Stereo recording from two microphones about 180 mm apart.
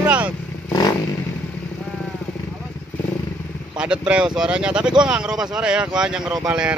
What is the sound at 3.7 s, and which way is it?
Speech, 5° right (ahead or behind).